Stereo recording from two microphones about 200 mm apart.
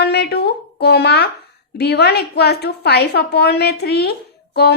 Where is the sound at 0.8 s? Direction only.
55° left (ahead or behind).